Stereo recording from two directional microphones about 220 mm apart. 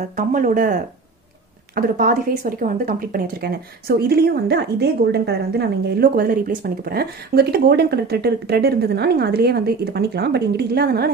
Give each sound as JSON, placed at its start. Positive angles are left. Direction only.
{"t": 0.0, "sound": "a woman's voice", "side_deg": -35}